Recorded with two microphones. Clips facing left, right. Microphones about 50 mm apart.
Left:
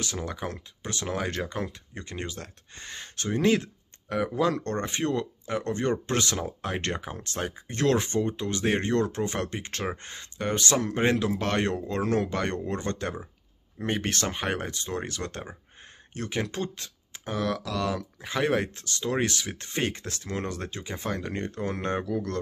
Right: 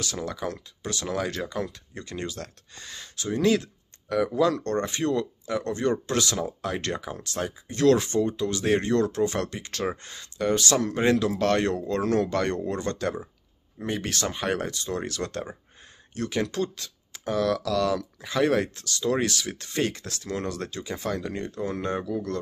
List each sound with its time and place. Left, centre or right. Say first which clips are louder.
0.0 s speech: right 2 dB; left
13.7 s speech: left 1 dB; left
14.5 s speech: right 2 dB; left
21.1 s speech: even; left